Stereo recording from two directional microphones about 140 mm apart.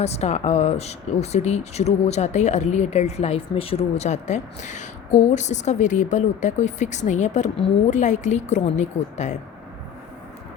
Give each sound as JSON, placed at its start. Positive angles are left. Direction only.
{"t": 0.0, "sound": "a woman's voice", "side_deg": 50}